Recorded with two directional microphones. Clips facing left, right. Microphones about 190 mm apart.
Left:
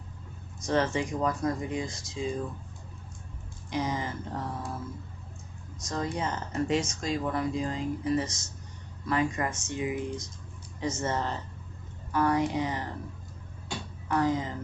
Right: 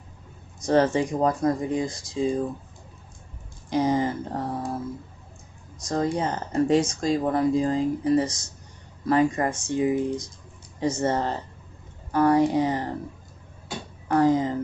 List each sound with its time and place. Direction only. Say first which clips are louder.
0.7 s speech: right 7 dB; 35° right (ahead or behind)
3.7 s speech: right 9 dB; 35° right (ahead or behind)
5.9 s speech: right 7 dB; 35° right (ahead or behind)
14.0 s speech: right 7 dB; 35° right (ahead or behind)